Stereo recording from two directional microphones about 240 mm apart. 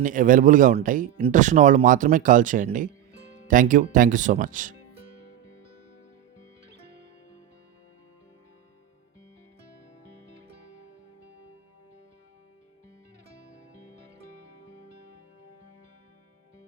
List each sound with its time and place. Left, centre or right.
0.0 s speech: right